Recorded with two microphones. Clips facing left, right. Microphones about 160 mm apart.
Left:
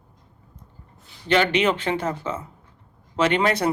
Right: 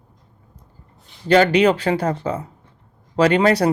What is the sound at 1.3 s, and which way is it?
Speech, 35° right (ahead or behind).